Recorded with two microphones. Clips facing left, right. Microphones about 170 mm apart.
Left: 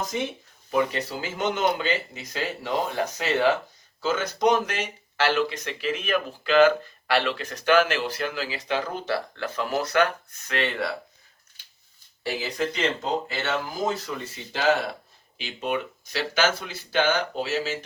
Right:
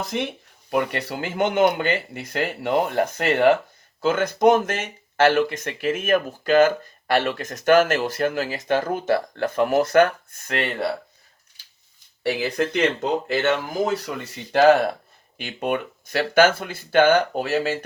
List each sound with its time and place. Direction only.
0.1 s speech: 65° right (ahead or behind); by 10.7 s 50° right (ahead or behind)
12.2 s speech: 60° right (ahead or behind)